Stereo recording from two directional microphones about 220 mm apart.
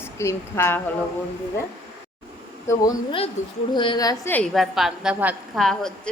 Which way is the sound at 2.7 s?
15° left (ahead or behind).